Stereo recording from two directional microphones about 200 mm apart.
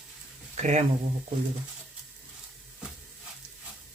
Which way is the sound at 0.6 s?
35° right (ahead or behind).